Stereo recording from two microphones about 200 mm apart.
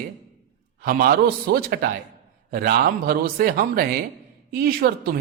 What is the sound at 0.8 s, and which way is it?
Speech, 45° right (ahead or behind).